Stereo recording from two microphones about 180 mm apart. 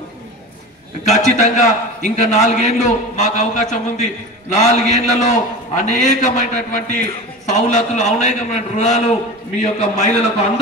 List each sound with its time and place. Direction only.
1.0 s a man's voice: 40° left (ahead or behind)